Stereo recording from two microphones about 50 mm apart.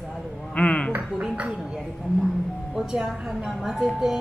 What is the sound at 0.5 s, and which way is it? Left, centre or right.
Speech, left.